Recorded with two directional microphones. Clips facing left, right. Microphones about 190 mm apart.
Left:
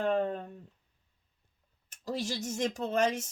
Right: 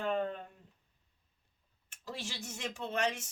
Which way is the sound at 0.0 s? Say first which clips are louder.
Left 5 dB; 40° left (ahead or behind).